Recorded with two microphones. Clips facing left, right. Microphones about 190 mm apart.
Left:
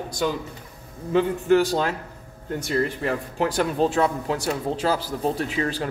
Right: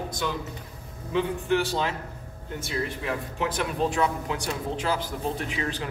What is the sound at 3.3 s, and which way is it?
A man's voice, 35° left (ahead or behind).